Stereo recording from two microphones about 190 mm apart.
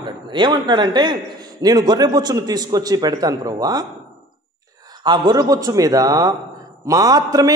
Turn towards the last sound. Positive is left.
turn(degrees=-20)  # may be behind; listen again after turning